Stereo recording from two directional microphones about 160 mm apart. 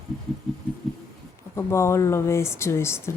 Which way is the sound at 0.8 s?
Centre (ahead or behind).